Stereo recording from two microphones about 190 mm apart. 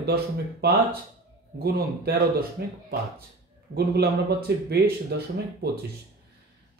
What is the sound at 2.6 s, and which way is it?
Speech, 55° right (ahead or behind).